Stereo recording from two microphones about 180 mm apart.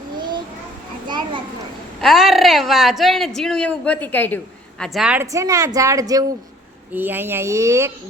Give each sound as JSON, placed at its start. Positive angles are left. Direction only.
{"t": 1.0, "sound": "children playing", "side_deg": -25}
{"t": 2.0, "sound": "speech", "side_deg": 0}
{"t": 4.8, "sound": "speech", "side_deg": 0}
{"t": 5.2, "sound": "a woman's voice", "side_deg": -15}